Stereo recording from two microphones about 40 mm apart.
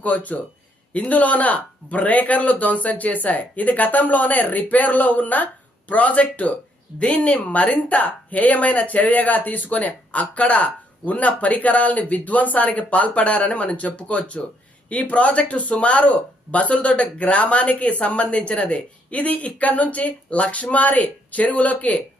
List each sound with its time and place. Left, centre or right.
0.0 s speech: left